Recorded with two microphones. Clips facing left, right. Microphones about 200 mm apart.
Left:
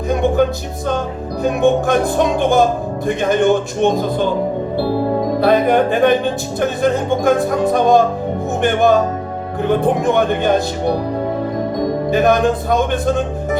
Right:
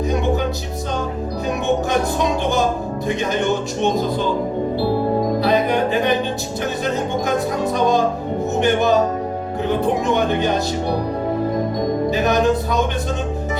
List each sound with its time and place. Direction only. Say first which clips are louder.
0.1 s music: left 8 dB; 50° left (ahead or behind)
1.5 s music: left 7 dB; 50° left (ahead or behind)
3.1 s speech: left 6 dB; 50° left (ahead or behind)
5.4 s speech: left 8 dB; 50° left (ahead or behind)
12.1 s speech: left 5 dB; 50° left (ahead or behind)